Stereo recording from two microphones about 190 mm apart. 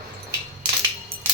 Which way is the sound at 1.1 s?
30° right (ahead or behind).